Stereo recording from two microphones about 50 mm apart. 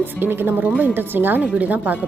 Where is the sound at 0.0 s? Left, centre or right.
Right.